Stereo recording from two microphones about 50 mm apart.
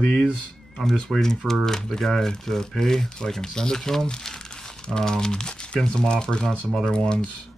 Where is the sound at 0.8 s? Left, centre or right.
Centre.